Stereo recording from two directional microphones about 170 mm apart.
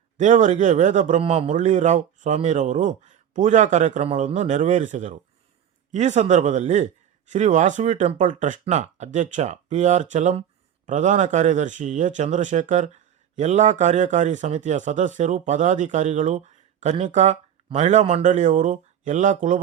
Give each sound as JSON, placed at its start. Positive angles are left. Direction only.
{"t": 0.2, "sound": "speech", "side_deg": -45}